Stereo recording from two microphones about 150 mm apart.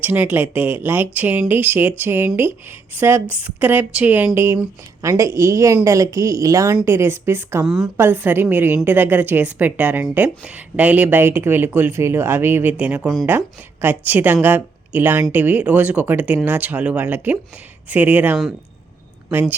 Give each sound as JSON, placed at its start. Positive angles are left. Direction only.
{"t": 0.0, "sound": "a woman's voice", "side_deg": -15}
{"t": 7.6, "sound": "a woman's voice", "side_deg": -5}
{"t": 7.9, "sound": "a woman's voice", "side_deg": -15}